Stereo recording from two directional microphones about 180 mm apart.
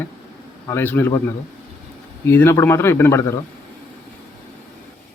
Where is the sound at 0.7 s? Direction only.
10° left (ahead or behind).